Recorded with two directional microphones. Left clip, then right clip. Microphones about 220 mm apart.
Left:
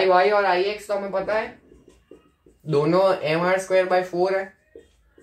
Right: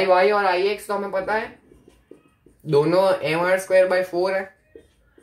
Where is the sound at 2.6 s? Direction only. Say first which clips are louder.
Right 1 dB; 40° right (ahead or behind).